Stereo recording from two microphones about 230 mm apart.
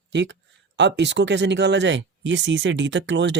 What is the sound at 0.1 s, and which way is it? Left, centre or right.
Speech, right.